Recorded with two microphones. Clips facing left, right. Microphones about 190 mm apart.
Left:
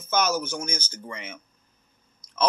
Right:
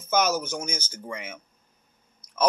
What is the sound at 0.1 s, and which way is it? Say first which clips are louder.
Speech: right 1 dB; 15° right (ahead or behind).